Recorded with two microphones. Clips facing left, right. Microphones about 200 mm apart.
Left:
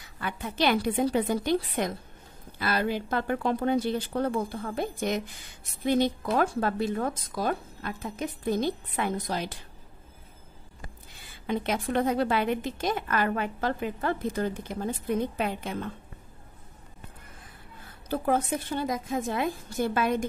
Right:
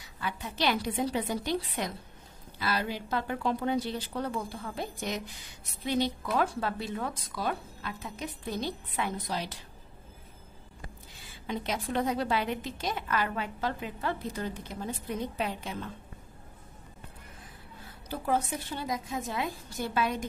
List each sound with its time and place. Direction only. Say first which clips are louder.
0.2 s a woman's voice: left 4 dB; 55° left (ahead or behind)
11.4 s a woman's voice: left 5 dB; 55° left (ahead or behind)
18.0 s a woman's voice: left 4 dB; 55° left (ahead or behind)